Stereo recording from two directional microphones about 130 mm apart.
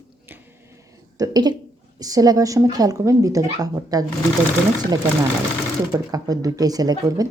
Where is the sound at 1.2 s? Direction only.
30° right (ahead or behind).